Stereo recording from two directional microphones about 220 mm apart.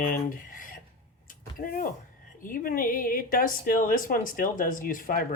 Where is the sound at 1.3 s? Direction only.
40° left (ahead or behind).